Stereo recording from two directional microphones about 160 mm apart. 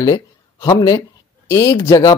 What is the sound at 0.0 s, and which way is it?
Speech, 20° left (ahead or behind).